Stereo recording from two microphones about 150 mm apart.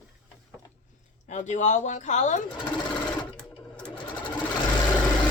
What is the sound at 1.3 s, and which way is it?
Speech, 55° left (ahead or behind).